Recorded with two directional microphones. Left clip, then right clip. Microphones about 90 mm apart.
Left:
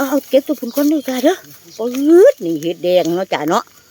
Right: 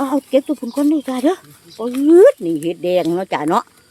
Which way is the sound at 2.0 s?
20° left (ahead or behind).